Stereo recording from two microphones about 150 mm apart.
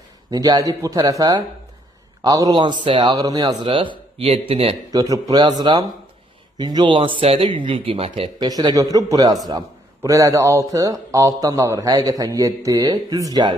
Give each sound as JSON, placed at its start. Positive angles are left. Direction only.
{"t": 0.3, "sound": "a man's voice", "side_deg": -25}
{"t": 3.6, "sound": "speech", "side_deg": -35}
{"t": 4.9, "sound": "a man's voice", "side_deg": -25}
{"t": 8.5, "sound": "a man's voice", "side_deg": -25}